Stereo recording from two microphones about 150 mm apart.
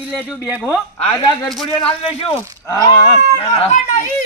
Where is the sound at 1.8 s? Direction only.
40° left (ahead or behind).